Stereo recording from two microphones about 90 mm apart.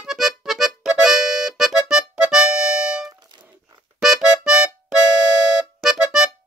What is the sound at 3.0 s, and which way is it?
Music, 55° right (ahead or behind).